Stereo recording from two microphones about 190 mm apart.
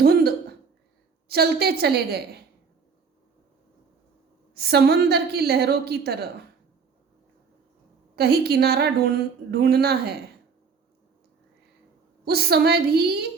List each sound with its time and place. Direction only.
0.0 s a sound: 55° right (ahead or behind)
1.3 s a woman's voice: 55° right (ahead or behind)
4.5 s a woman's voice: 55° right (ahead or behind)
8.1 s a woman's voice: 55° right (ahead or behind)
12.2 s a woman's voice: 55° right (ahead or behind)